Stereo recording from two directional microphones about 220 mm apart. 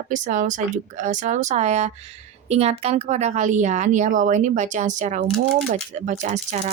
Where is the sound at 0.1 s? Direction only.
35° right (ahead or behind).